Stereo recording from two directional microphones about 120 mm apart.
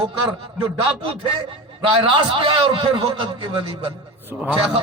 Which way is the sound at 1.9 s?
45° right (ahead or behind).